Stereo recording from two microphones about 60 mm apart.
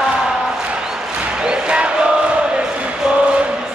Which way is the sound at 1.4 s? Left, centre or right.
Centre.